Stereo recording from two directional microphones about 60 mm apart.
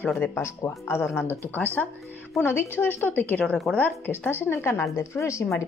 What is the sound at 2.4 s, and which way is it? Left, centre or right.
A woman's voice, left.